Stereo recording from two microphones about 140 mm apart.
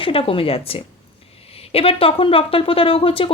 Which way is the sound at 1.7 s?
40° left (ahead or behind).